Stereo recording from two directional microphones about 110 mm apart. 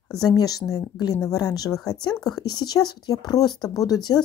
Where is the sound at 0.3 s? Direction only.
35° left (ahead or behind).